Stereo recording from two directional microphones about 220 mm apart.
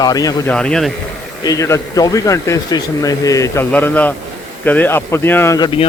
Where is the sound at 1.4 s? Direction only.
15° left (ahead or behind).